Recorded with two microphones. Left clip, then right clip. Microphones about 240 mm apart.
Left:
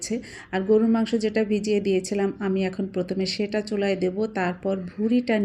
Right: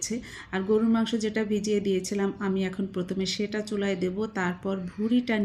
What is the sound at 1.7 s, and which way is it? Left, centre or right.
Speech, right.